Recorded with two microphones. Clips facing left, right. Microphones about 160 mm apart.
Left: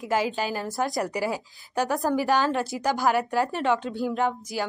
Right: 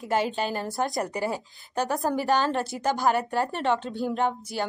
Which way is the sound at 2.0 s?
20° right (ahead or behind).